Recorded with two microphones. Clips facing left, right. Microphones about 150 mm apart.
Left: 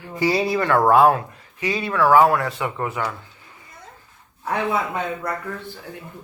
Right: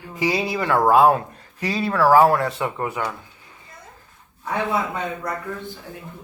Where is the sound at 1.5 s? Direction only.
35° right (ahead or behind); by 3.1 s 15° right (ahead or behind).